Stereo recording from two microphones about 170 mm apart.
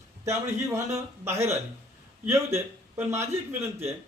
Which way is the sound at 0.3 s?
15° right (ahead or behind).